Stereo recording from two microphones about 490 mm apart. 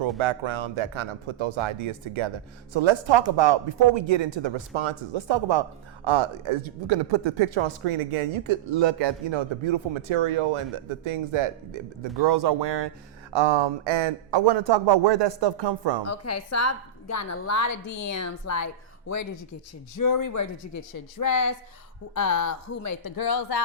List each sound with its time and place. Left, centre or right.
0.2 s speech: right
16.0 s a woman's voice: left